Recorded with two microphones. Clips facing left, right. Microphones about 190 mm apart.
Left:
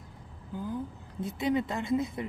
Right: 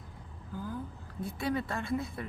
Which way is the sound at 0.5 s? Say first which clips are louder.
Left 4 dB; 20° left (ahead or behind).